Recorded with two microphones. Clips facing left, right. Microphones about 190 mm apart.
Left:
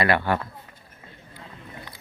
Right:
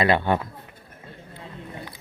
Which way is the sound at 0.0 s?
20° right (ahead or behind).